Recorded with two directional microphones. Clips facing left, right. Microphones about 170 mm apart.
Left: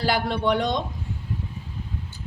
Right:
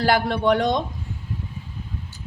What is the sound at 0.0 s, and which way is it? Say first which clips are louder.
Speech: right 3 dB; 50° right (ahead or behind).